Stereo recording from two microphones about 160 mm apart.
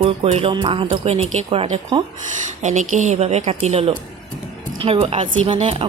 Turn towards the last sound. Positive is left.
turn(degrees=-40)  # may be behind; listen again after turning